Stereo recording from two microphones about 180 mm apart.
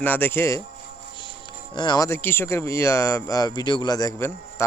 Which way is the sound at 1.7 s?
25° left (ahead or behind).